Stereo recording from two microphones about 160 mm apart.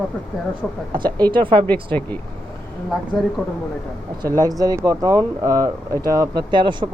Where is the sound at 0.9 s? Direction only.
30° right (ahead or behind).